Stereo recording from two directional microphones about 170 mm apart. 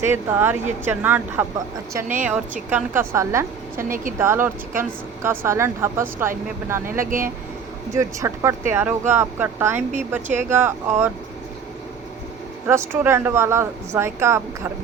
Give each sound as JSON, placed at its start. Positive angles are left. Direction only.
{"t": 0.0, "sound": "speech", "side_deg": -15}
{"t": 3.8, "sound": "a woman's voice", "side_deg": -55}
{"t": 4.2, "sound": "speech", "side_deg": -15}
{"t": 7.0, "sound": "a woman's voice", "side_deg": -55}
{"t": 7.9, "sound": "speech", "side_deg": -20}
{"t": 12.6, "sound": "speech", "side_deg": -15}